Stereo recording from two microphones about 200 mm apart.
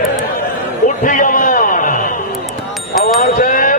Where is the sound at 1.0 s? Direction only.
40° left (ahead or behind).